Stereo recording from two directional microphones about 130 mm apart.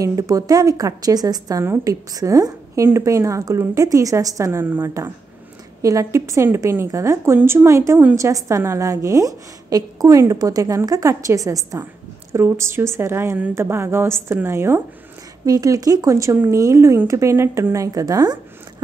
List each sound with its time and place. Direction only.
0.0 s a woman's voice: 25° right (ahead or behind)